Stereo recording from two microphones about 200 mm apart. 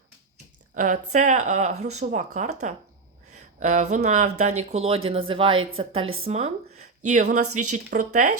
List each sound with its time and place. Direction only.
0.7 s speech: 40° right (ahead or behind)